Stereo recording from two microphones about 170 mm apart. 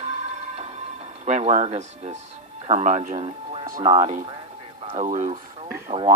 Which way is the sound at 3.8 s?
35° right (ahead or behind).